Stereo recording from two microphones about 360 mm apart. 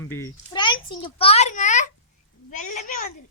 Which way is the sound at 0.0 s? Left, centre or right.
Centre.